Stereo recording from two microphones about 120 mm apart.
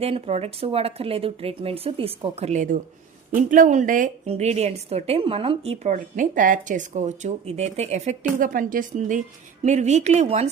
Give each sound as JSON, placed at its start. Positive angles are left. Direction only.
{"t": 0.0, "sound": "a woman's voice", "side_deg": -60}
{"t": 8.4, "sound": "a woman's voice", "side_deg": -90}
{"t": 9.6, "sound": "a woman's voice", "side_deg": -75}